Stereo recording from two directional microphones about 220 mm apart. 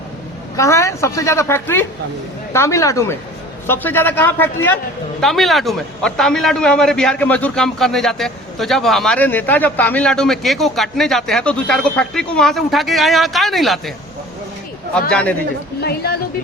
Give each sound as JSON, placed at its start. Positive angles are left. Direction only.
{"t": 0.5, "sound": "a woman's voice", "side_deg": 15}
{"t": 15.1, "sound": "a man's voice", "side_deg": 5}
{"t": 15.8, "sound": "a woman's voice", "side_deg": 45}